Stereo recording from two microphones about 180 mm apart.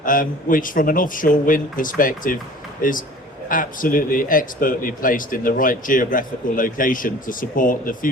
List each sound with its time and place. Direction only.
0.0 s speech: 50° left (ahead or behind)
3.5 s speech: 50° left (ahead or behind)